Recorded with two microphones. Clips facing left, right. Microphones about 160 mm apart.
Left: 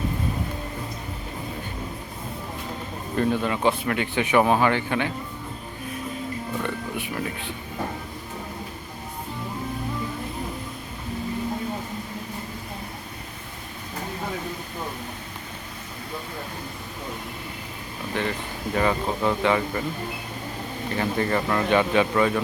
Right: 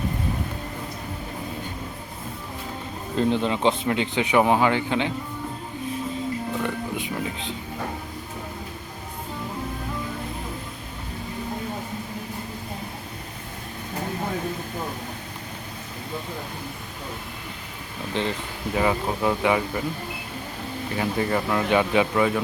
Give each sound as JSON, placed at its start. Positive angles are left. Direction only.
{"t": 3.2, "sound": "speech", "side_deg": -20}
{"t": 6.6, "sound": "speech", "side_deg": -15}
{"t": 18.1, "sound": "speech", "side_deg": -20}
{"t": 20.9, "sound": "speech", "side_deg": -10}